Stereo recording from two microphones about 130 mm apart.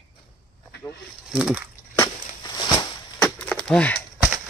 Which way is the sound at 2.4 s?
35° left (ahead or behind).